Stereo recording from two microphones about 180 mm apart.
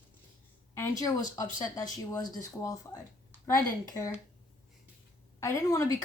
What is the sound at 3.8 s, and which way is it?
Speech, 15° left (ahead or behind).